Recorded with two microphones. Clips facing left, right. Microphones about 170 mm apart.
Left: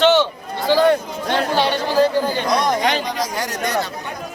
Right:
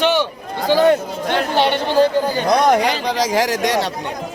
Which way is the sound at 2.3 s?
50° right (ahead or behind).